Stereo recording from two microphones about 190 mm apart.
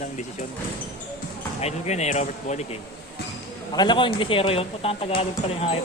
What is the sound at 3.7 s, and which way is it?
Speech, 25° left (ahead or behind).